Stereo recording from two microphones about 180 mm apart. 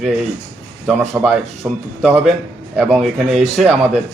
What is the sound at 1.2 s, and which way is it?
A man's voice, 15° right (ahead or behind).